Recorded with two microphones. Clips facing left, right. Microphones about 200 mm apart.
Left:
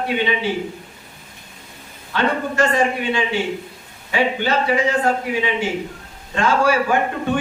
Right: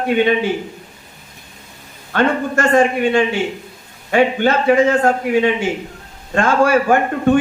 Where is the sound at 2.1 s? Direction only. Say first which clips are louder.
Right 3 dB; 50° right (ahead or behind).